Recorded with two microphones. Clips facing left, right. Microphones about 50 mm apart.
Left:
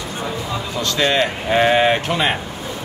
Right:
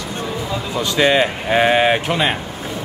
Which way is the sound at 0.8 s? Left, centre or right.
Centre.